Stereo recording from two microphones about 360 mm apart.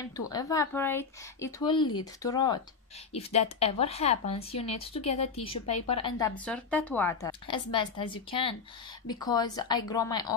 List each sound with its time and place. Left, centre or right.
0.3 s speech: centre